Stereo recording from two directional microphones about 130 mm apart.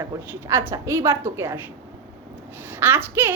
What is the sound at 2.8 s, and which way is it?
Speech, 15° right (ahead or behind).